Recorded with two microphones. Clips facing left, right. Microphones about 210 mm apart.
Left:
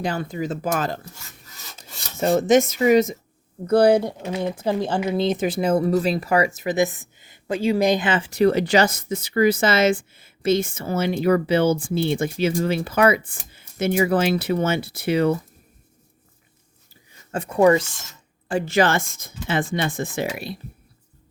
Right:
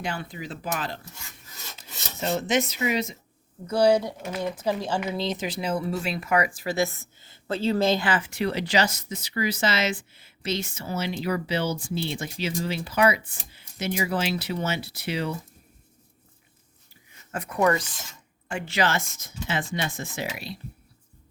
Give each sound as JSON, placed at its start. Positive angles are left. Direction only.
{"t": 0.0, "sound": "speech", "side_deg": 40}
{"t": 2.1, "sound": "speech", "side_deg": 50}
{"t": 8.3, "sound": "speech", "side_deg": 45}
{"t": 17.1, "sound": "speech", "side_deg": 30}
{"t": 18.4, "sound": "speech", "side_deg": 40}